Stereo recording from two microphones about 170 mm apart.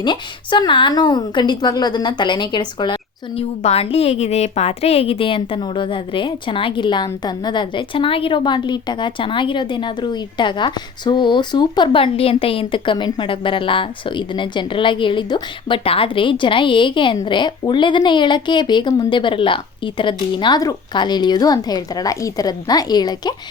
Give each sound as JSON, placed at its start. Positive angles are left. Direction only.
{"t": 0.0, "sound": "a woman's voice", "side_deg": 25}